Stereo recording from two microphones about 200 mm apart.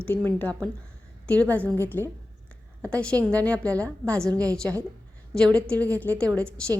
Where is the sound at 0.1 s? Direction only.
10° left (ahead or behind).